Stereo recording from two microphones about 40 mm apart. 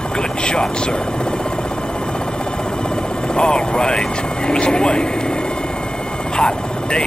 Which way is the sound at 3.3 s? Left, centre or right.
Left.